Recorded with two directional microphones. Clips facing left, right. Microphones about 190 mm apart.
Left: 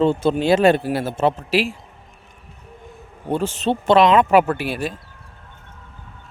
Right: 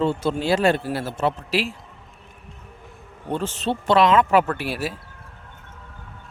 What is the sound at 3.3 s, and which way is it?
Speech, 15° left (ahead or behind).